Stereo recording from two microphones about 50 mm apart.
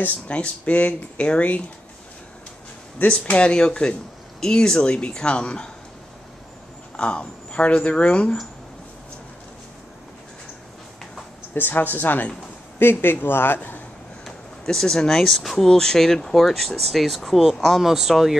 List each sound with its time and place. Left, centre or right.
0.3 s speech: left
3.0 s speech: left
7.0 s speech: left
11.5 s speech: left
12.7 s speech: left
14.2 s speech: centre